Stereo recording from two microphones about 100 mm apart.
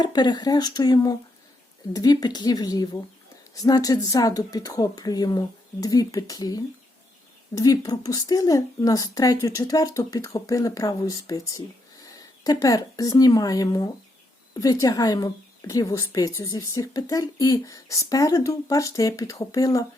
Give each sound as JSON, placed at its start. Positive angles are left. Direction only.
{"t": 0.0, "sound": "a woman's voice", "side_deg": 45}